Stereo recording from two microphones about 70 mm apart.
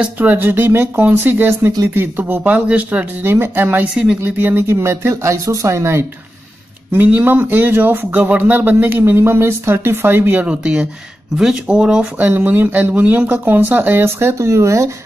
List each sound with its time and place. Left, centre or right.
0.0 s speech: right
3.3 s speech: right
6.9 s speech: right
10.4 s speech: centre
12.2 s speech: right